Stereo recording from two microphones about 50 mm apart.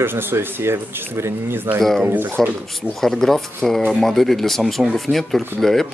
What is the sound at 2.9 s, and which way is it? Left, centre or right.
Speech, centre.